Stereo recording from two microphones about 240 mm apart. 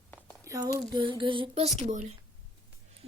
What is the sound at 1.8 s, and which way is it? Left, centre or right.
Speech, right.